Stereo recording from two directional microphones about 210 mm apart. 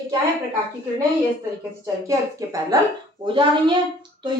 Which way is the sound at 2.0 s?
15° right (ahead or behind).